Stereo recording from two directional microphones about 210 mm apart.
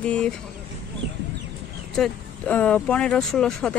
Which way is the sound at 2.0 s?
5° left (ahead or behind).